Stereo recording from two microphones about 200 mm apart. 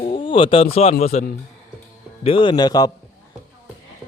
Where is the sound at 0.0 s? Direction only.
25° left (ahead or behind).